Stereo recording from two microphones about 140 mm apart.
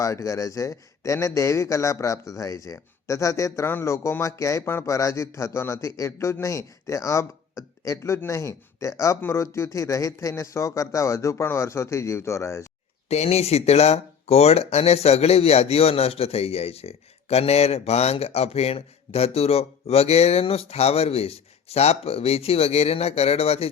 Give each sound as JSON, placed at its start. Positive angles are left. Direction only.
{"t": 0.0, "sound": "a man's voice", "side_deg": 25}
{"t": 13.1, "sound": "speech", "side_deg": 50}